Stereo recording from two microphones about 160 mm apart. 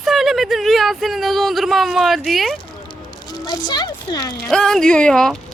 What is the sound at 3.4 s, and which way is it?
Speech, 25° left (ahead or behind).